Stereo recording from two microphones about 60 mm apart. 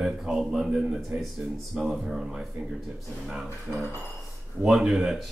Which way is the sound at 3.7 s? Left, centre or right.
Right.